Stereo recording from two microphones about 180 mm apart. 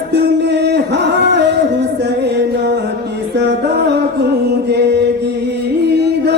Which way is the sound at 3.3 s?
70° right (ahead or behind).